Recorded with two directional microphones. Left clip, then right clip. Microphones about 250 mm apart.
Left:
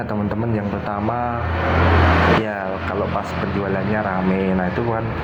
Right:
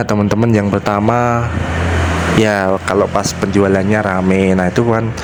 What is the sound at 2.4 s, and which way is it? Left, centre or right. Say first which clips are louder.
Speech: right 10 dB; right.